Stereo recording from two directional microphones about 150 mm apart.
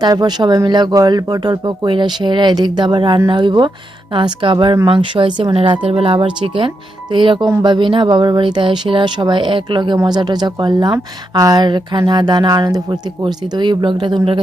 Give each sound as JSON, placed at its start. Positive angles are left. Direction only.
{"t": 0.0, "sound": "speech", "side_deg": -25}